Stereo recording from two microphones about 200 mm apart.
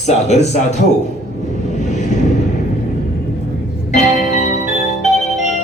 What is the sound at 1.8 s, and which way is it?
Vehicle, 35° left (ahead or behind).